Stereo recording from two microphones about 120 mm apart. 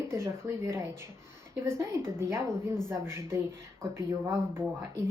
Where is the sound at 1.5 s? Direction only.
20° right (ahead or behind).